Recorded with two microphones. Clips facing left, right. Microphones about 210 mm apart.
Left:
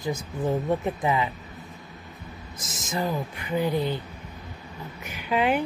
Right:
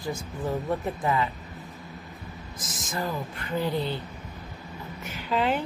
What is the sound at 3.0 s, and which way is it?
Speech, 10° left (ahead or behind).